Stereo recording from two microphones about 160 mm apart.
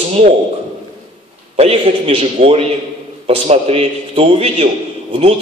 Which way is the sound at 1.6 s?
40° right (ahead or behind).